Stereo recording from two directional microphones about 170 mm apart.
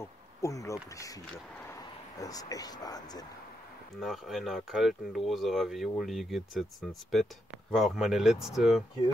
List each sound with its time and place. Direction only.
0.0 s speech: 20° left (ahead or behind)
4.0 s speech: centre (ahead or behind)